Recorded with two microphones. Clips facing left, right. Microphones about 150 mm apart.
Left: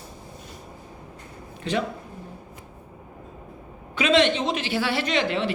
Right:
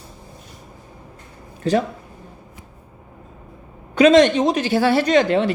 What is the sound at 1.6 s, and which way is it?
Speech, 40° right (ahead or behind).